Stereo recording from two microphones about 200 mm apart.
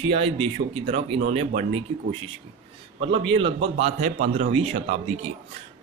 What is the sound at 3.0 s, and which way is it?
Speech, 25° right (ahead or behind).